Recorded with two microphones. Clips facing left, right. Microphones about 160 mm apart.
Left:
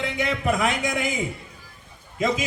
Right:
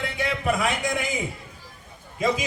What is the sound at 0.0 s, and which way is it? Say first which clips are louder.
A man's voice: left 1 dB; 20° left (ahead or behind).